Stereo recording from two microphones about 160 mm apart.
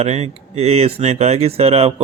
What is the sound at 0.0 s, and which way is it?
Speech, 40° right (ahead or behind).